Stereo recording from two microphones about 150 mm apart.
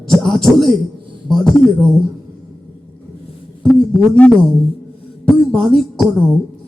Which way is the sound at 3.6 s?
10° left (ahead or behind).